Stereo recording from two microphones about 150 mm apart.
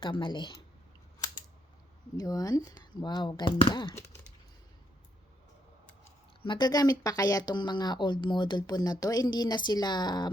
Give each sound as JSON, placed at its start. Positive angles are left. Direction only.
{"t": 0.0, "sound": "speech", "side_deg": 30}
{"t": 2.1, "sound": "speech", "side_deg": 25}
{"t": 6.4, "sound": "speech", "side_deg": 30}